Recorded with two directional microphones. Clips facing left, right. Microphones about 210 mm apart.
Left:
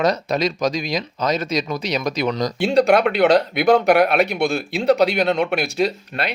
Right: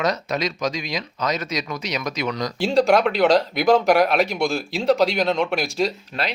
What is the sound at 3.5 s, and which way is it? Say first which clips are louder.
Speech: left 2 dB; 60° left (ahead or behind).